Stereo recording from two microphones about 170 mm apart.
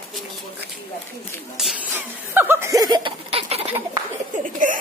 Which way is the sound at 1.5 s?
5° right (ahead or behind).